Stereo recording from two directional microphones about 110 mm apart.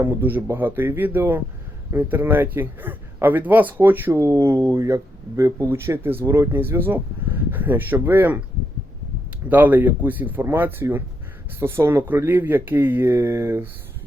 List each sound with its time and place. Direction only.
0.0 s a man's voice: 15° right (ahead or behind)
9.5 s a man's voice: 15° right (ahead or behind)